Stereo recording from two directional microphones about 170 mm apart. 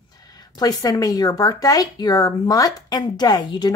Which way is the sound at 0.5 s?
20° left (ahead or behind).